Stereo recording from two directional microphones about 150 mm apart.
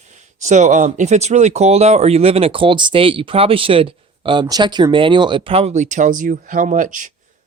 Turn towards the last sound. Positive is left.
turn(degrees=-60)  # may be behind; listen again after turning